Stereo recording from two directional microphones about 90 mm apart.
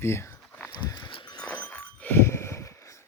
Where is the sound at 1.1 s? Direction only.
75° left (ahead or behind).